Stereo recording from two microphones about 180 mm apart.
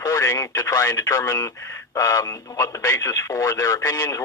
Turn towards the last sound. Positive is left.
turn(degrees=20)  # may be behind; listen again after turning